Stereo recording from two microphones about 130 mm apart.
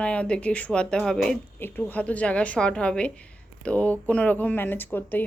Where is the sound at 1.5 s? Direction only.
15° left (ahead or behind).